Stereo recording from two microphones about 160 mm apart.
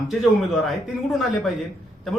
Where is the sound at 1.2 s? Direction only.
Centre (ahead or behind).